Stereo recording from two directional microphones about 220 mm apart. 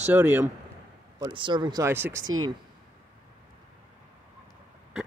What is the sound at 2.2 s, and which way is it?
Speech, 70° right (ahead or behind).